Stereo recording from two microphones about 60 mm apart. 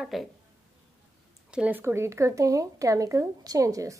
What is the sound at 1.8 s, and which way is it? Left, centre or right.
A woman's voice, right.